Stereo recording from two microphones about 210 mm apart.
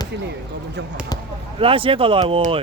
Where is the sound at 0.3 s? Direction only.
55° right (ahead or behind).